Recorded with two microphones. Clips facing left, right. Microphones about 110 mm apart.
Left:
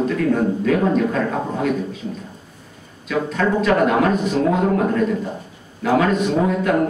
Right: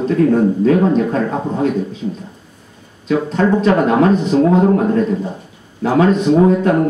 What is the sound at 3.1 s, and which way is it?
Speech, 30° right (ahead or behind).